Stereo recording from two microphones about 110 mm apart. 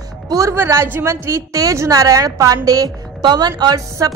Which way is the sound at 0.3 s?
30° right (ahead or behind).